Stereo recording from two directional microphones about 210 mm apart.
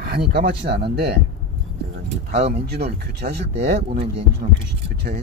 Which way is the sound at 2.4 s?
30° right (ahead or behind).